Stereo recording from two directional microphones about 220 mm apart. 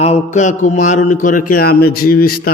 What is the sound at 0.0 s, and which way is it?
A man's voice, 30° left (ahead or behind).